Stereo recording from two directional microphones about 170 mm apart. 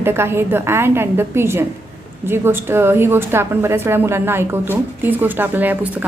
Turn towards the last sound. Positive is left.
turn(degrees=-10)  # may be behind; listen again after turning